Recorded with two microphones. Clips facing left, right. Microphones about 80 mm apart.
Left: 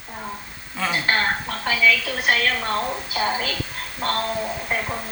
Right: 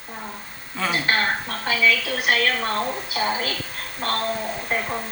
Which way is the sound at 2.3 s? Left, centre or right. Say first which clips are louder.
Even; right.